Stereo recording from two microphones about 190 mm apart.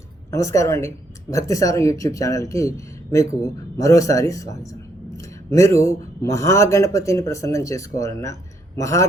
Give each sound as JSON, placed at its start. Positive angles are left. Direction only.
{"t": 0.3, "sound": "speech", "side_deg": 15}